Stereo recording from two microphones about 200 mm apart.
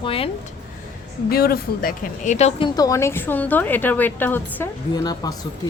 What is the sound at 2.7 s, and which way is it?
A woman's voice, 15° left (ahead or behind).